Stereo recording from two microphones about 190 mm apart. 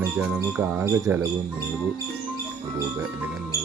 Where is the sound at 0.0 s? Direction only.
10° right (ahead or behind).